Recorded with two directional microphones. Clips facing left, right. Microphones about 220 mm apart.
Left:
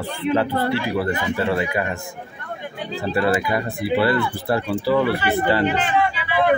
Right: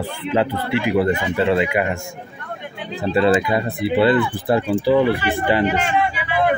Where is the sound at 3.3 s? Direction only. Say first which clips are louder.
Right 3 dB; 20° right (ahead or behind).